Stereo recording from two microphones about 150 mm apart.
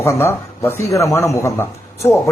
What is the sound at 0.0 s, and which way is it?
A man's voice, 15° left (ahead or behind).